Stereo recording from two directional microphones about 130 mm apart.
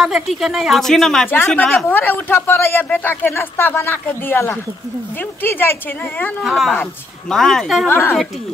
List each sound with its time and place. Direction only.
0.0 s speech: centre (ahead or behind)
1.9 s speech: 15° left (ahead or behind)
6.4 s speech: centre (ahead or behind)
7.9 s speech: 20° left (ahead or behind)